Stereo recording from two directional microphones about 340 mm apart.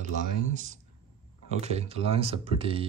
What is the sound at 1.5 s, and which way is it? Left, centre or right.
Speech, centre.